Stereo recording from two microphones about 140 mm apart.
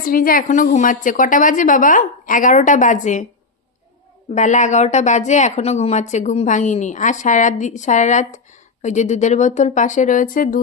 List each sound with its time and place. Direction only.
0.0 s a woman's voice: 90° left; by 3.2 s 60° left (ahead or behind)
4.4 s speech: 60° left (ahead or behind); by 10.6 s 80° left